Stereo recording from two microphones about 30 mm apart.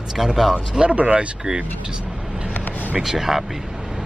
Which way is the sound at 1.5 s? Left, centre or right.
Right.